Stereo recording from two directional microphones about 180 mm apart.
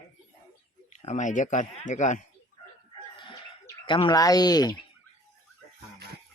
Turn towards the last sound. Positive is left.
turn(degrees=25)  # may be behind; listen again after turning